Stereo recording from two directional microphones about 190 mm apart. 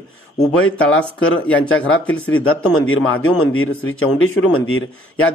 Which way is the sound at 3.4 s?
90° left.